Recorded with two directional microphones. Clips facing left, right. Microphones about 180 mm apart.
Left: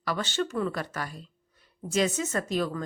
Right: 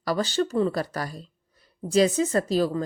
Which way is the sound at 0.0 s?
35° right (ahead or behind).